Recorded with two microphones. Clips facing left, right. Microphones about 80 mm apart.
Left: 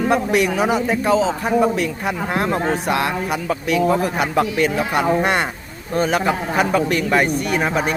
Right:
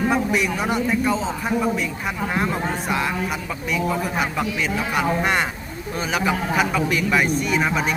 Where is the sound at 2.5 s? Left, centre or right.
Left.